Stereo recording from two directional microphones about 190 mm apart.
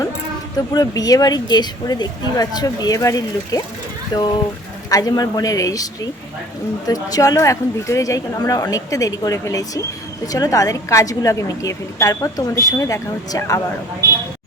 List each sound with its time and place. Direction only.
0.5 s a woman's voice: 20° left (ahead or behind)